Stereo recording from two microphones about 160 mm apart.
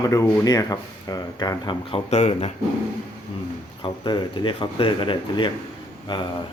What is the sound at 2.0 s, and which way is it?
Speech, 45° left (ahead or behind).